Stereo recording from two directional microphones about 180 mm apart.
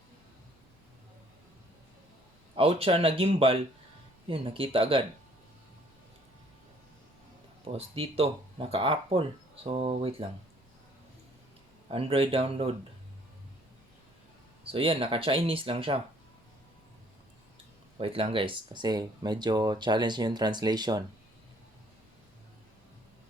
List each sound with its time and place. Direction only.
2.6 s speech: 30° right (ahead or behind)
7.7 s speech: 35° right (ahead or behind)
11.9 s speech: 30° right (ahead or behind)
14.7 s speech: 30° right (ahead or behind)
17.9 s speech: 30° right (ahead or behind)